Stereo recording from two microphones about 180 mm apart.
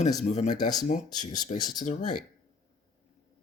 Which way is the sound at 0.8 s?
45° left (ahead or behind).